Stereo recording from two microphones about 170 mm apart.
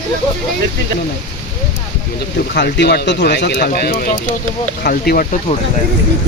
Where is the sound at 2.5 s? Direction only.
85° left; by 5.3 s 60° left (ahead or behind).